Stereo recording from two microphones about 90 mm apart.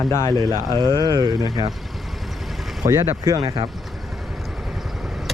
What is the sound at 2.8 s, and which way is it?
Speech, 40° right (ahead or behind).